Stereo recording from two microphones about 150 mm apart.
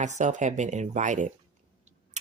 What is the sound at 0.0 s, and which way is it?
Speech, 50° right (ahead or behind).